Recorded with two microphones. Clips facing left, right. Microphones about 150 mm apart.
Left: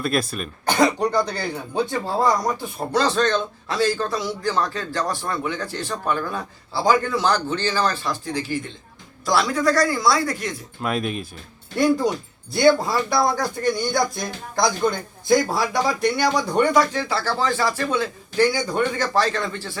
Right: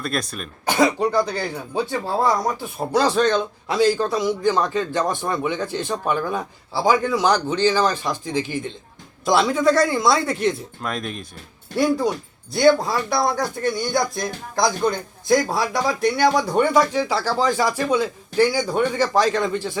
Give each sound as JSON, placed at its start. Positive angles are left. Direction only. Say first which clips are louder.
{"t": 0.0, "sound": "speech", "louder": "left 3 dB", "side_deg": 5}
{"t": 10.8, "sound": "speech", "louder": "left 3 dB", "side_deg": 5}